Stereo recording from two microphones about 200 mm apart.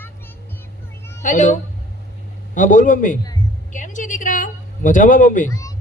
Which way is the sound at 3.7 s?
40° left (ahead or behind).